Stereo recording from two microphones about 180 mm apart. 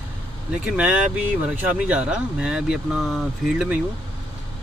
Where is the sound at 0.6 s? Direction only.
5° right (ahead or behind).